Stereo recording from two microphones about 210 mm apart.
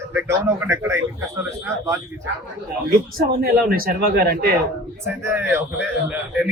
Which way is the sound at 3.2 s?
45° right (ahead or behind).